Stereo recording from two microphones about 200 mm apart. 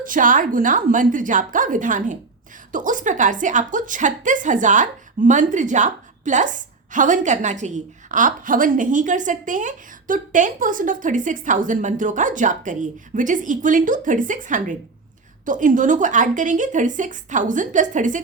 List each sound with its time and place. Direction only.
0.0 s a woman's voice: 40° right (ahead or behind)